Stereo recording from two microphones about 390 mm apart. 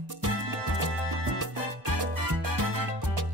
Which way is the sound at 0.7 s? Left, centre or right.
Right.